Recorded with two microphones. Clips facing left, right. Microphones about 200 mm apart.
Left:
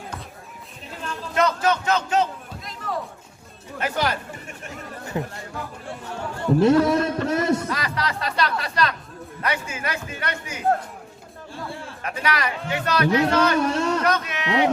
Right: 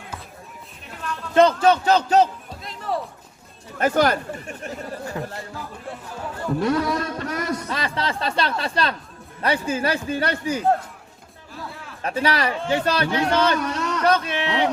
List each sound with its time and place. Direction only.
1.3 s a man's voice: 30° right (ahead or behind)
2.8 s a sound: 30° right (ahead or behind)
3.8 s speech: 45° right (ahead or behind)
5.2 s a man's voice: 20° left (ahead or behind)
6.6 s a man's voice: 25° left (ahead or behind)
7.7 s a man's voice: 25° right (ahead or behind)
11.7 s a sound: 30° left (ahead or behind)
12.0 s a man's voice: 30° right (ahead or behind)
13.6 s speech: 30° left (ahead or behind)
14.0 s speech: 30° right (ahead or behind)